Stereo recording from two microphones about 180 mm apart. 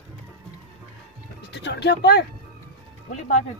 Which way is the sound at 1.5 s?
75° left (ahead or behind).